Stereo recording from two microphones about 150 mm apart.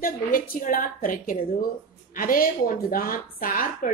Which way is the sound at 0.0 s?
65° left (ahead or behind).